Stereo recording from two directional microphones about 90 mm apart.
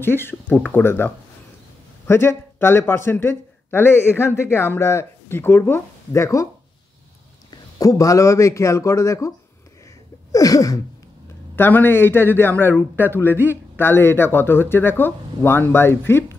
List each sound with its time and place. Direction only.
0.0 s speech: 25° left (ahead or behind)
7.5 s a man's voice: 40° left (ahead or behind)
10.3 s a man's voice: 40° left (ahead or behind)
11.5 s speech: 25° left (ahead or behind)
13.3 s a man's voice: 20° right (ahead or behind)
13.7 s speech: 25° left (ahead or behind)